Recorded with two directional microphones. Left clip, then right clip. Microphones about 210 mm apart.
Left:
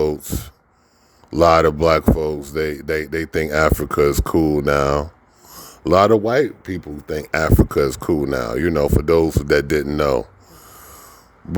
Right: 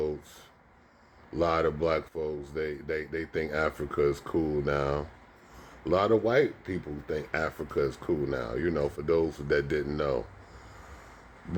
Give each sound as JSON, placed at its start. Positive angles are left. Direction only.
{"t": 0.0, "sound": "speech", "side_deg": 55}